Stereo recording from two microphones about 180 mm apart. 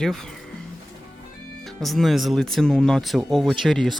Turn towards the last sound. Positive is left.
turn(degrees=0)  # may be behind; listen again after turning